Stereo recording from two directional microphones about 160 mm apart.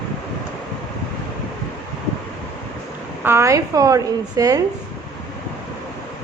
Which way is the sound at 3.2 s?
15° right (ahead or behind).